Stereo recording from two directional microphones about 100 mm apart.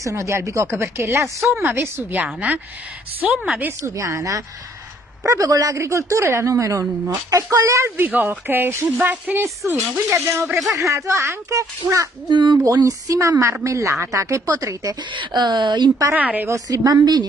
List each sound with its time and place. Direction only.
0.0 s a woman's voice: 30° right (ahead or behind); by 3.4 s 10° right (ahead or behind)
3.6 s speech: 30° right (ahead or behind)
8.0 s speech: 15° right (ahead or behind)
12.3 s speech: 50° right (ahead or behind)
12.6 s speech: 35° right (ahead or behind)
15.1 s speech: 45° right (ahead or behind)
16.1 s a woman's voice: 15° right (ahead or behind)
16.4 s speech: 35° right (ahead or behind)